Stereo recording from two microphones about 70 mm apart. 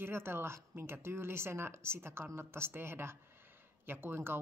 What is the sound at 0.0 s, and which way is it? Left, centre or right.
Speech, right.